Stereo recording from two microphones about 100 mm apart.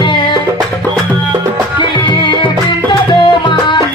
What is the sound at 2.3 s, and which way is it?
Music, 50° left (ahead or behind).